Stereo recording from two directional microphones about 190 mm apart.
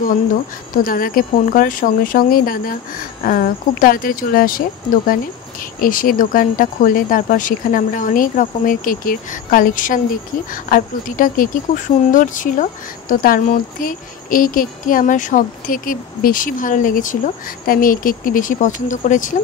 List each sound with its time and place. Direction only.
0.8 s speech: 50° left (ahead or behind)